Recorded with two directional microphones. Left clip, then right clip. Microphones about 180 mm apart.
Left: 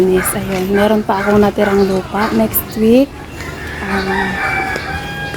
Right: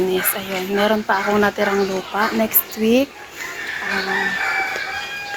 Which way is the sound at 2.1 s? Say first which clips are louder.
Left 1 dB; 25° right (ahead or behind).